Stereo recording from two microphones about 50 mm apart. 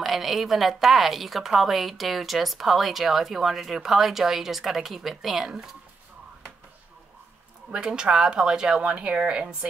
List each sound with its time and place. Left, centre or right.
0.0 s a woman's voice: centre
7.7 s speech: centre